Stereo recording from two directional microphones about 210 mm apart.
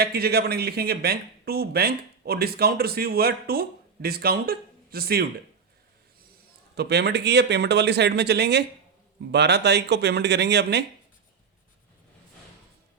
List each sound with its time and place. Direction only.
0.0 s a man's voice: 50° right (ahead or behind)
6.7 s a man's voice: 50° right (ahead or behind)